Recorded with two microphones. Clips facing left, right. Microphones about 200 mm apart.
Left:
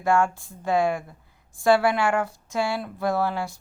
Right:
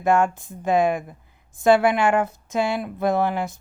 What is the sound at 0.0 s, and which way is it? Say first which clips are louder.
Speech: right 3 dB; 20° right (ahead or behind).